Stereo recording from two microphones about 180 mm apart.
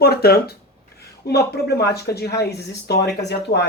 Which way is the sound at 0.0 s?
60° left (ahead or behind).